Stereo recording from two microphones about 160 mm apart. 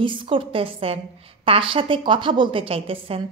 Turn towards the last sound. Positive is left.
turn(degrees=-35)  # may be behind; listen again after turning